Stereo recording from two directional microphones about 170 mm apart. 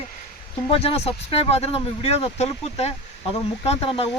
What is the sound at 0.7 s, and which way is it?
Speech, 35° left (ahead or behind).